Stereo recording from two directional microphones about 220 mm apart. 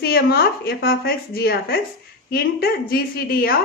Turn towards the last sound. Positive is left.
turn(degrees=45)  # may be behind; listen again after turning